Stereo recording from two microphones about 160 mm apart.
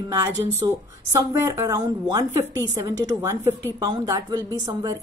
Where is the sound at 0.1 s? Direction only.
20° right (ahead or behind).